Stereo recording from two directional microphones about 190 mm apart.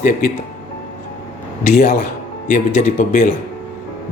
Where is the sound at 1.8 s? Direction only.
45° left (ahead or behind).